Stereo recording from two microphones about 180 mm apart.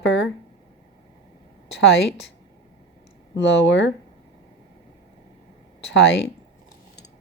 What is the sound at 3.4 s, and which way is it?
Speech, 75° left (ahead or behind).